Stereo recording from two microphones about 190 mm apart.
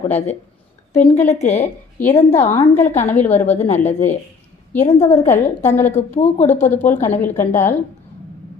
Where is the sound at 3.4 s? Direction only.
35° left (ahead or behind).